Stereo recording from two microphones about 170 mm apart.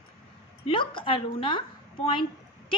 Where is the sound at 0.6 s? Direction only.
30° left (ahead or behind).